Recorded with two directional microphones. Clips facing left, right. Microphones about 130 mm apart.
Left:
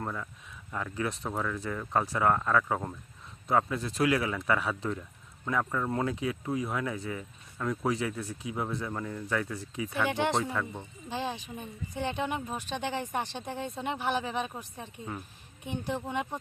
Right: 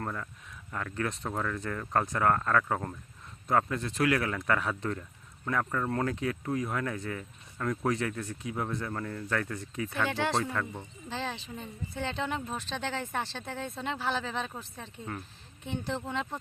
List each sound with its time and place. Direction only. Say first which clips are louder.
0.0 s speech: even; 5° left (ahead or behind)